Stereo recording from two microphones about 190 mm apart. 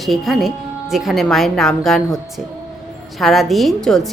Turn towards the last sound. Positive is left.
turn(degrees=0)  # may be behind; listen again after turning